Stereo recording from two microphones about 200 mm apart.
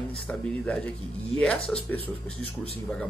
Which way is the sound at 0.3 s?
5° left (ahead or behind).